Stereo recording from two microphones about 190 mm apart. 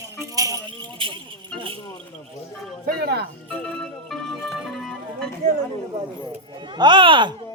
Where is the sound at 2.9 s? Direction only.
55° right (ahead or behind).